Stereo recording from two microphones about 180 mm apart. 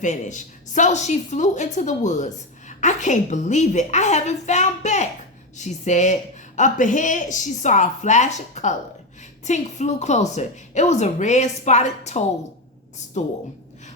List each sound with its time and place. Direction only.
0.0 s a woman's voice: 45° left (ahead or behind)